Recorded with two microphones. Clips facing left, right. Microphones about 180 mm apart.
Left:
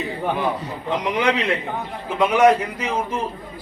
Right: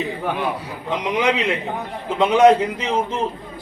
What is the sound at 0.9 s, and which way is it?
A man's voice, 20° right (ahead or behind).